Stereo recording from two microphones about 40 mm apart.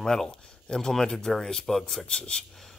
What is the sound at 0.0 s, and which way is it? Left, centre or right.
Speech, centre.